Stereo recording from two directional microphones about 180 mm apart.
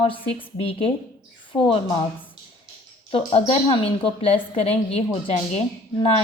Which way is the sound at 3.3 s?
30° left (ahead or behind).